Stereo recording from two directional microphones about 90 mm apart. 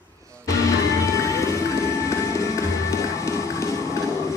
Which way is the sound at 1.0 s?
35° left (ahead or behind).